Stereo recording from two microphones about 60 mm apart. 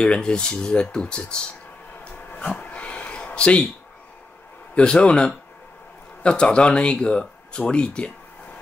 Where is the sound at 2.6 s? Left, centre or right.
Left.